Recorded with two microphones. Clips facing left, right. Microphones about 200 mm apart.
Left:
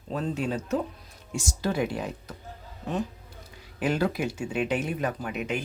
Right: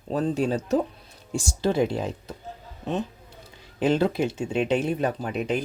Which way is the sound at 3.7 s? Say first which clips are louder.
Right 4 dB; 25° right (ahead or behind).